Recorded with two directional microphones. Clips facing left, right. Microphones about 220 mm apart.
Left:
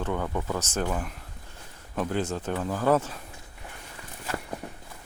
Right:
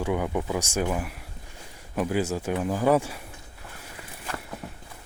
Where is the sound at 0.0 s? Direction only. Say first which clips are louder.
Right 3 dB; 10° right (ahead or behind).